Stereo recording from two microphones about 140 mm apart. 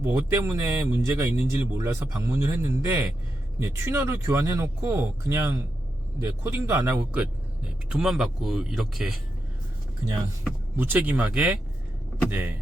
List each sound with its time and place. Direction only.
0.0 s speech: 20° right (ahead or behind); by 9.1 s centre (ahead or behind)
10.8 s speech: 10° right (ahead or behind)